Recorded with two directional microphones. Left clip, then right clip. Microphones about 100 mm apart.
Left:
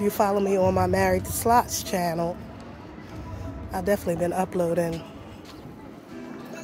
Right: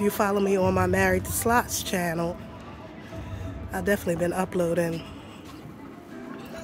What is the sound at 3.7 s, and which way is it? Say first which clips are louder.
Speech: left 1 dB; 35° right (ahead or behind).